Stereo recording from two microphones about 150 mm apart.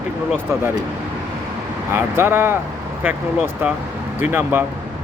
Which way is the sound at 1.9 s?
15° right (ahead or behind).